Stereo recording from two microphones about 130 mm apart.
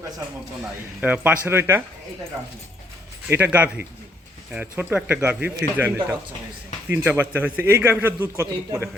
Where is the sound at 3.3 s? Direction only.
15° right (ahead or behind).